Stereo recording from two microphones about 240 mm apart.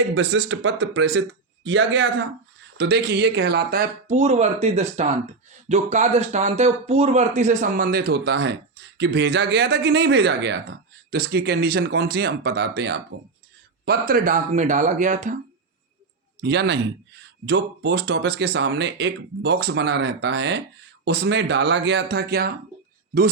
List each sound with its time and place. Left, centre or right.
0.1 s speech: right
16.4 s speech: right